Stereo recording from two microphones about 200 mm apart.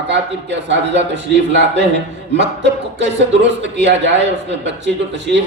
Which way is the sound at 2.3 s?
60° right (ahead or behind).